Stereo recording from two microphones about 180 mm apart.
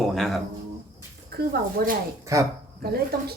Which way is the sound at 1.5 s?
50° right (ahead or behind).